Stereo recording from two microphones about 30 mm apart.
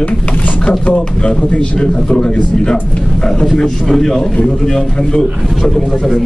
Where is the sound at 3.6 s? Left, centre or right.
Centre.